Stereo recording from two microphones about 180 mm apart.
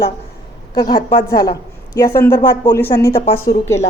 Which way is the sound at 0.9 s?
25° left (ahead or behind).